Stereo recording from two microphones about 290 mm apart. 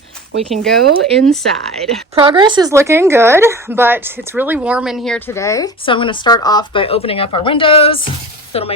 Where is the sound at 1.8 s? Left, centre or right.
Centre.